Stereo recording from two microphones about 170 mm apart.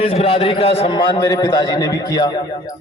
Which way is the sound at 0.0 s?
40° left (ahead or behind).